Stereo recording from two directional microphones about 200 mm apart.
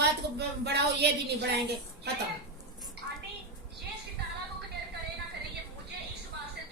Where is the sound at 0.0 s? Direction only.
55° right (ahead or behind).